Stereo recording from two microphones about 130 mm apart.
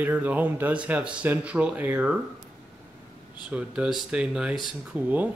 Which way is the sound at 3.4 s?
10° right (ahead or behind).